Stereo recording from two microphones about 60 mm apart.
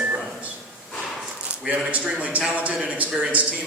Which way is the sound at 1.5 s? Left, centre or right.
Right.